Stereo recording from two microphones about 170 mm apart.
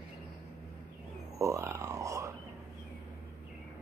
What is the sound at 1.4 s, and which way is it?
Grunt, 15° right (ahead or behind).